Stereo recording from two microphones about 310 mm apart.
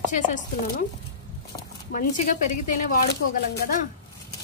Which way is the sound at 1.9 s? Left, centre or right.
Left.